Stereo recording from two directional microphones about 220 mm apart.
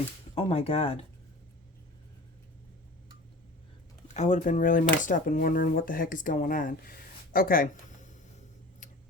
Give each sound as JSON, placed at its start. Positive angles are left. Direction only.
{"t": 0.3, "sound": "speech", "side_deg": 25}
{"t": 4.1, "sound": "speech", "side_deg": 35}